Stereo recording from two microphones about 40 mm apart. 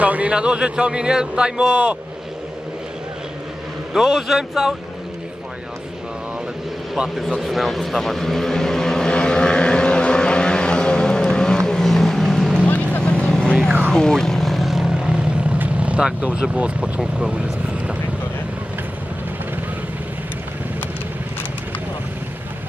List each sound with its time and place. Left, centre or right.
0.0 s a sound: right
0.3 s speech: right
3.9 s speech: centre
7.3 s vehicle: centre
12.6 s vehicle: left
13.0 s vehicle: left; by 14.9 s centre
14.9 s vehicle: right
16.2 s speech: right
17.3 s vehicle: right